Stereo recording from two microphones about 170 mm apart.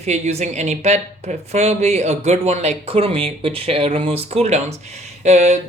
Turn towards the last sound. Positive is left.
turn(degrees=-45)  # may be behind; listen again after turning